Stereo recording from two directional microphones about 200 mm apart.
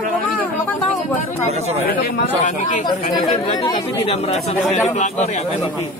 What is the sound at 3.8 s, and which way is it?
Speech, 25° left (ahead or behind).